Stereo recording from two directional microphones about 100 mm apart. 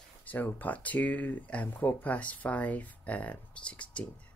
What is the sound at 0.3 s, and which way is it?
Speech, 15° left (ahead or behind).